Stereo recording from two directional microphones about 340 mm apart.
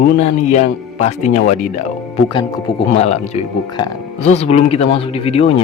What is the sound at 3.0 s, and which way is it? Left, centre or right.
Speech, centre.